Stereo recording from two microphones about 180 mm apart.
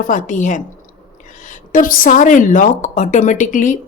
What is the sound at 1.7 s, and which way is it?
A woman's voice, 50° left (ahead or behind).